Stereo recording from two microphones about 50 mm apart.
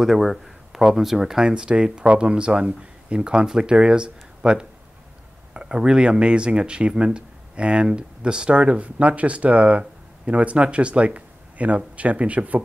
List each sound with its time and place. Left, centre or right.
0.0 s speech: centre; by 12.6 s right